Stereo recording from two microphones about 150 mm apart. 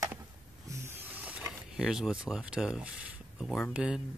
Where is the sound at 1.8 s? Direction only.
5° right (ahead or behind).